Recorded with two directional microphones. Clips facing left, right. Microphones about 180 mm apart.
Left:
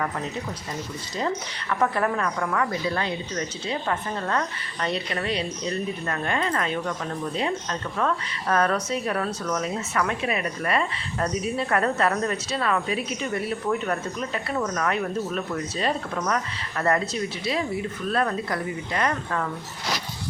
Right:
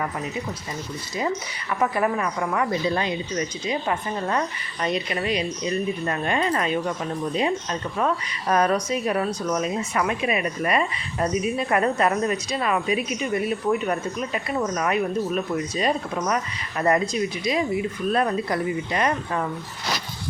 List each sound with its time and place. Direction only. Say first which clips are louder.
1.7 s speech: right 1 dB; 10° right (ahead or behind)